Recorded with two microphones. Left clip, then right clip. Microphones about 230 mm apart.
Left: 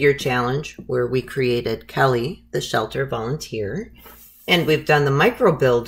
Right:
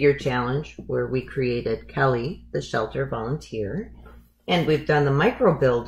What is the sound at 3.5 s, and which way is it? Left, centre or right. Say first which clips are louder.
Speech: left 3 dB; left.